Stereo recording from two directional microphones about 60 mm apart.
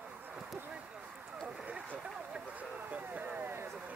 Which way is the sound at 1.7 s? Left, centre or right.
Right.